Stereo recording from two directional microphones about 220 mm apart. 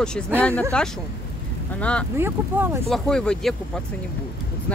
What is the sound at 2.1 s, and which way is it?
Speech, 10° right (ahead or behind).